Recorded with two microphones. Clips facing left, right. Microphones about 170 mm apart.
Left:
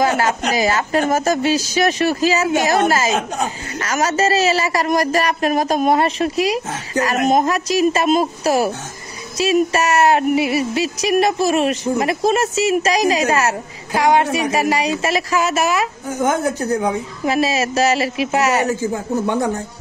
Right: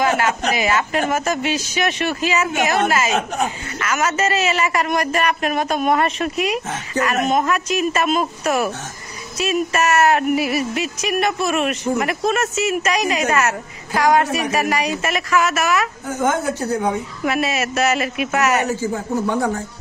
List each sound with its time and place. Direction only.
0.0 s speech: 35° left (ahead or behind)
17.2 s speech: 30° left (ahead or behind)